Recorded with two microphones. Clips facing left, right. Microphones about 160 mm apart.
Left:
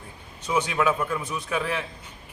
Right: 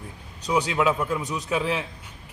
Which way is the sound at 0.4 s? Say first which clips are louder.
Right 1 dB; 15° right (ahead or behind).